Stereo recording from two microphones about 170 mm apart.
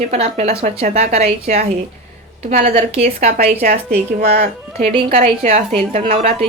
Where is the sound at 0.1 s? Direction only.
40° right (ahead or behind).